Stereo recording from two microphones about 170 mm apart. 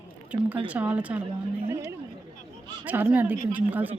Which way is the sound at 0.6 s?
10° right (ahead or behind).